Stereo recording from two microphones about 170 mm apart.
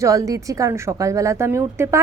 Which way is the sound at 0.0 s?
20° right (ahead or behind).